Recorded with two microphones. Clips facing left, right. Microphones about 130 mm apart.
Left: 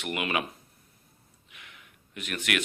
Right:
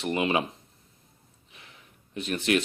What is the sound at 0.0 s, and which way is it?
Speech, 30° right (ahead or behind).